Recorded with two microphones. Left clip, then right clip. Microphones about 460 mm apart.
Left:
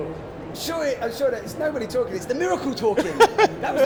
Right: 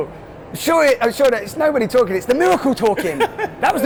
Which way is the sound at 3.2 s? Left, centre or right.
Left.